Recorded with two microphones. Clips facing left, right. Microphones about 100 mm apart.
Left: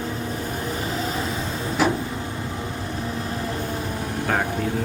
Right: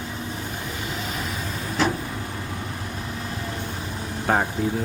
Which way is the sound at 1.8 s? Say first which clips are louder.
Left 2 dB; 10° left (ahead or behind).